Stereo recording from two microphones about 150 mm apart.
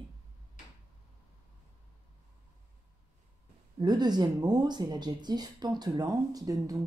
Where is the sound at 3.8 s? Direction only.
25° right (ahead or behind).